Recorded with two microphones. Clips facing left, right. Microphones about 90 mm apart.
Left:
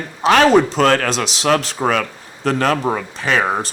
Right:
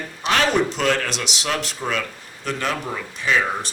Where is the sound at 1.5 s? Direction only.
65° left (ahead or behind).